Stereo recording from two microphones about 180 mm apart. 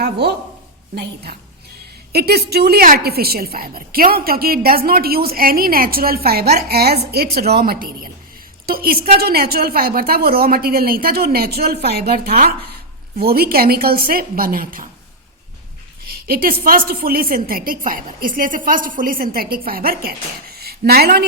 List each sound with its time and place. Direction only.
0.0 s a woman's voice: 65° right (ahead or behind)
16.0 s a woman's voice: 55° right (ahead or behind)